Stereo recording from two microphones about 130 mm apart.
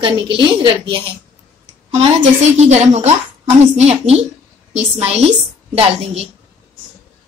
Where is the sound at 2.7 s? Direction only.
60° right (ahead or behind).